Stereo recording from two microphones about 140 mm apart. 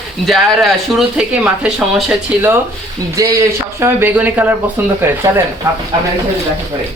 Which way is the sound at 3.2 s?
25° right (ahead or behind).